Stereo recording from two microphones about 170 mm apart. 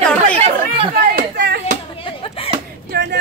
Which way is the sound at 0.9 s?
70° right (ahead or behind).